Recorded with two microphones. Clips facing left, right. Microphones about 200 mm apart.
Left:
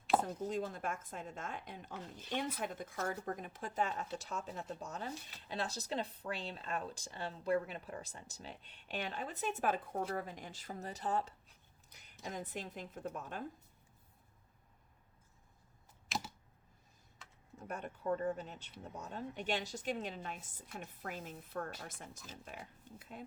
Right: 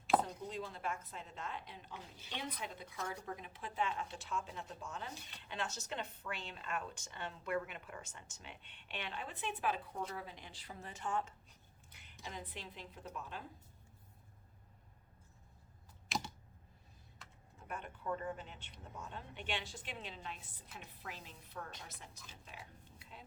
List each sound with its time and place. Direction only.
0.3 s a woman's voice: 45° left (ahead or behind)
11.9 s a sound: 40° left (ahead or behind)
12.3 s a woman's voice: 45° left (ahead or behind)
16.0 s typing: centre (ahead or behind)
17.6 s a woman's voice: 40° left (ahead or behind)